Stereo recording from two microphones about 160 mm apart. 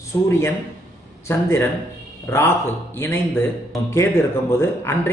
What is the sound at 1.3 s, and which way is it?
Speech, 15° left (ahead or behind).